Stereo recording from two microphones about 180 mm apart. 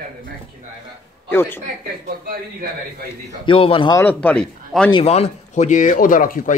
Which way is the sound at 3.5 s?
30° left (ahead or behind).